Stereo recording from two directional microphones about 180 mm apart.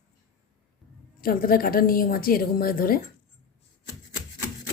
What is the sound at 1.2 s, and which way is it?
A woman's voice, 55° left (ahead or behind).